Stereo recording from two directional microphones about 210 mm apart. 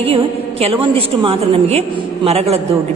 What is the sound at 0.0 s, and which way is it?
A man's voice, 30° right (ahead or behind).